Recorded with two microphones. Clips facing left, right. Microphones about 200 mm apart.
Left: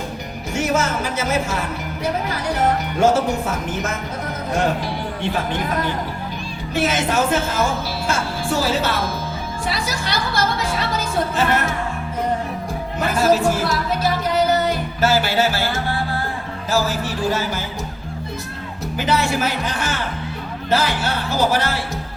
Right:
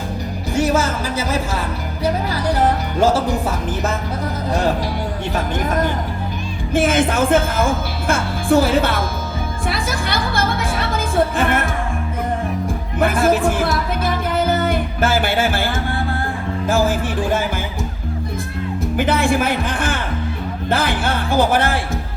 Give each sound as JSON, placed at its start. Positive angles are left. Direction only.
{"t": 0.5, "sound": "music", "side_deg": -35}
{"t": 5.3, "sound": "speech", "side_deg": -45}
{"t": 9.6, "sound": "music", "side_deg": -55}
{"t": 13.0, "sound": "speech", "side_deg": -55}
{"t": 14.7, "sound": "music", "side_deg": -55}
{"t": 16.6, "sound": "speech", "side_deg": -55}
{"t": 18.9, "sound": "speech", "side_deg": -55}